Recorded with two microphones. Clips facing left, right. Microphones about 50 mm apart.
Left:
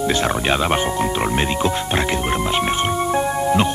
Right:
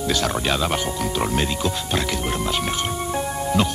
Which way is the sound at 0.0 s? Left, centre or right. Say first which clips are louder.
Left 3 dB; left.